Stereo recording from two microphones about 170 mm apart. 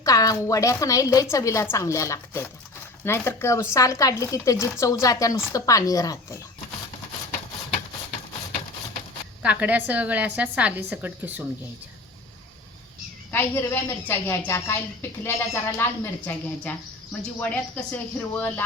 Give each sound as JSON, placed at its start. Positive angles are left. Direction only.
{"t": 0.0, "sound": "a woman's voice", "side_deg": 20}
{"t": 9.4, "sound": "a woman's voice", "side_deg": -10}
{"t": 13.3, "sound": "speech", "side_deg": 15}